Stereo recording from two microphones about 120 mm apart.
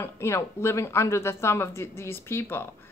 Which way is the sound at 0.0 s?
20° left (ahead or behind).